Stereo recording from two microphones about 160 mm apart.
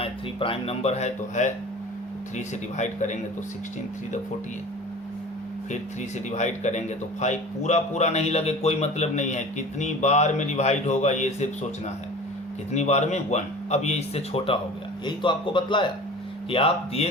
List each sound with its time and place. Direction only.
0.0 s speech: 35° left (ahead or behind)
2.7 s a man's voice: 50° left (ahead or behind)
6.3 s a man's voice: 45° left (ahead or behind)
12.7 s a man's voice: 45° left (ahead or behind)